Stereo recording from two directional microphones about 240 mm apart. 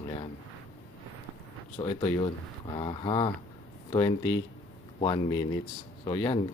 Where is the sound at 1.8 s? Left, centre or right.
Left.